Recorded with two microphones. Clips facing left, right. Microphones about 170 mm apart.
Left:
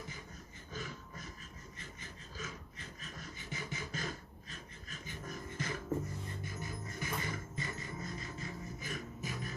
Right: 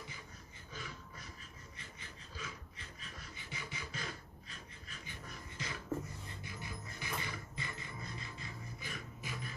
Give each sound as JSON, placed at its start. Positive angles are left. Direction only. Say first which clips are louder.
{"t": 0.7, "sound": "beatboxing", "louder": "left 4 dB", "side_deg": 45}
{"t": 1.8, "sound": "a sound", "louder": "left 3 dB", "side_deg": 45}
{"t": 6.4, "sound": "music", "louder": "left 4 dB", "side_deg": 45}